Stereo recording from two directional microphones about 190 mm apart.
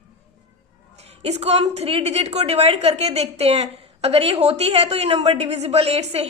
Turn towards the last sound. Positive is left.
turn(degrees=-35)  # may be behind; listen again after turning